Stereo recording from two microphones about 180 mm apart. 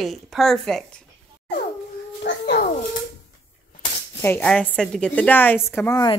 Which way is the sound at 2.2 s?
70° left (ahead or behind).